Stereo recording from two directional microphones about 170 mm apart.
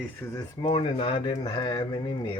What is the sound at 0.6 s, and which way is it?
Speech, 30° left (ahead or behind).